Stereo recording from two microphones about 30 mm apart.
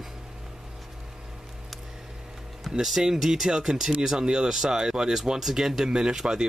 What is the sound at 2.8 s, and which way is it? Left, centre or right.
Speech, centre.